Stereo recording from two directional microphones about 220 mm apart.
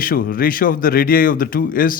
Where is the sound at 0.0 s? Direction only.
40° left (ahead or behind).